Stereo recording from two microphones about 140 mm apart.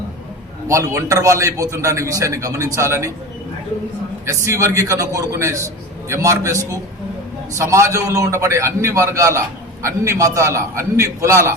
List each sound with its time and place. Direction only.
0.7 s a man's voice: 20° right (ahead or behind)
4.4 s a man's voice: 20° right (ahead or behind)